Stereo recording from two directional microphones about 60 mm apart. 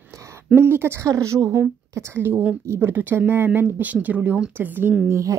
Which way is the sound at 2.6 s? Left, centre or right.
Right.